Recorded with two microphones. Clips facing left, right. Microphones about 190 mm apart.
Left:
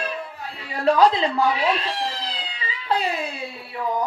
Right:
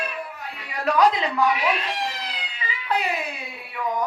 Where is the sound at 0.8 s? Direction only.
30° left (ahead or behind).